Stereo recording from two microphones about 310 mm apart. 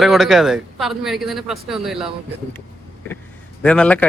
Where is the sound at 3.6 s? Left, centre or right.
Centre.